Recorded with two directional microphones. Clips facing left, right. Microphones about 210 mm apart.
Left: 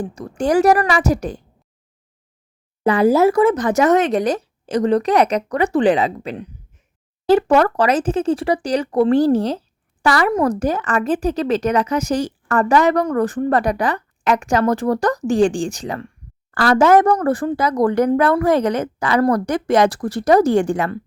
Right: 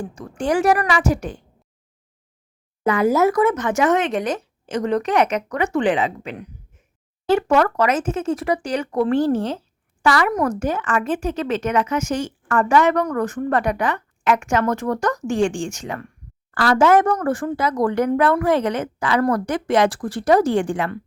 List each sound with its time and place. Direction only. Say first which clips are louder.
0.0 s a woman's voice: left 4 dB; 35° left (ahead or behind)
2.8 s a woman's voice: left 3 dB; 35° left (ahead or behind)